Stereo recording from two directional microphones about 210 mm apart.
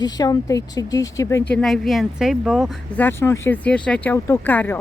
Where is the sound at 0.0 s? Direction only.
20° left (ahead or behind).